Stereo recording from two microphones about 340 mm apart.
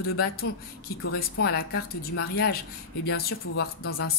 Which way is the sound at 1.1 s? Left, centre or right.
Left.